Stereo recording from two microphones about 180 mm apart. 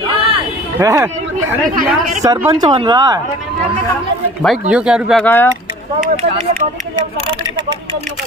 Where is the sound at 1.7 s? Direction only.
45° right (ahead or behind).